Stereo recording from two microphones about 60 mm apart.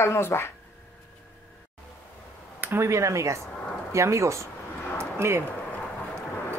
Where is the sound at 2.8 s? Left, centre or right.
Right.